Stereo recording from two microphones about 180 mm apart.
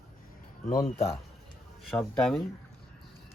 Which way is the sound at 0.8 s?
35° left (ahead or behind).